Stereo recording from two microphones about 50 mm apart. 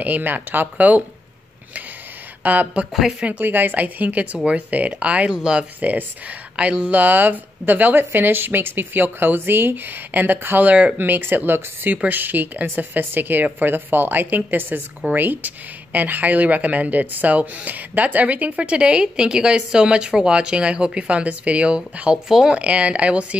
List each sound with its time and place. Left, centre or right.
0.0 s speech: right
2.4 s speech: right
2.9 s speech: centre
3.3 s speech: right; by 5.7 s centre
5.8 s speech: right
6.5 s speech: centre
6.9 s speech: right
11.0 s speech: right
22.3 s speech: centre
22.6 s speech: right